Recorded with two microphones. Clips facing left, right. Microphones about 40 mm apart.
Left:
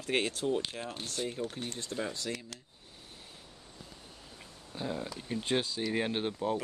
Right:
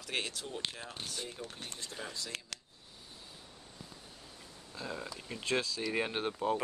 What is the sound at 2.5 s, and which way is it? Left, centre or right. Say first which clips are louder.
Speech: right 2 dB; right.